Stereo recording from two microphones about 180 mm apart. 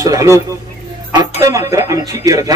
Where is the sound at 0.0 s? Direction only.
20° right (ahead or behind).